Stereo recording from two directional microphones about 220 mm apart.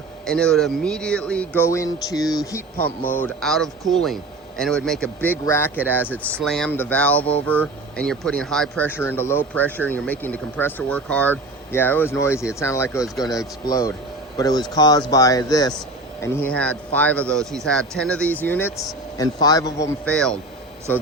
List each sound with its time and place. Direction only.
0.3 s speech: 5° left (ahead or behind)
20.1 s speech: 5° left (ahead or behind)